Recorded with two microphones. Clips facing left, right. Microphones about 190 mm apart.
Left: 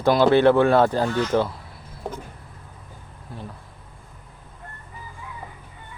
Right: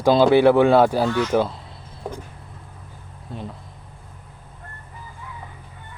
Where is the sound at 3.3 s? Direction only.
25° right (ahead or behind).